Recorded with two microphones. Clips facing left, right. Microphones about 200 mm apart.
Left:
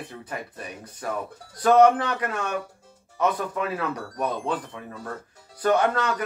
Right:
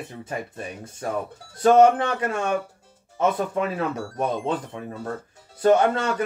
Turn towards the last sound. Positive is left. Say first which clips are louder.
# right 3 dB
turn(degrees=-25)  # may be behind; listen again after turning